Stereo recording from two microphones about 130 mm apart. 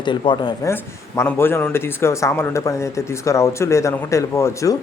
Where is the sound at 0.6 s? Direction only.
20° left (ahead or behind).